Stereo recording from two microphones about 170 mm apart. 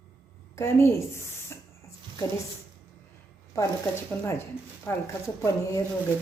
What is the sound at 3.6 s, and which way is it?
A man's voice, 15° left (ahead or behind).